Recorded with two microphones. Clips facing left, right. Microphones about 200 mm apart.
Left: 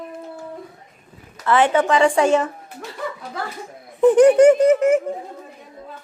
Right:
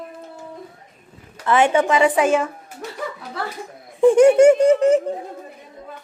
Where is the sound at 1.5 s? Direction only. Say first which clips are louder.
Even; 10° right (ahead or behind).